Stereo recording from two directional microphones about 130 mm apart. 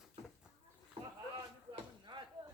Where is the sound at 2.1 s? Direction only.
35° right (ahead or behind).